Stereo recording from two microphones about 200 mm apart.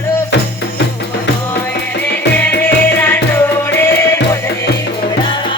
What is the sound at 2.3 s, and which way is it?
Music, 10° left (ahead or behind).